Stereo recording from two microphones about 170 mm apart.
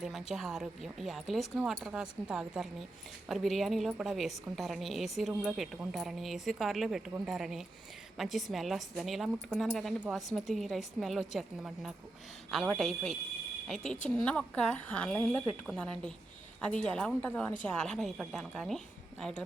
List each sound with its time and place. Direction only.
0.0 s a woman's voice: centre (ahead or behind)